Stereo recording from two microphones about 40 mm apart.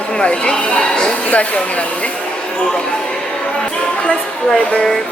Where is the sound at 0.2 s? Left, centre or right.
Left.